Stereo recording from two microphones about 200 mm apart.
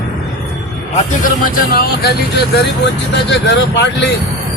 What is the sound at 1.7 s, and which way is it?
Speech, 50° left (ahead or behind).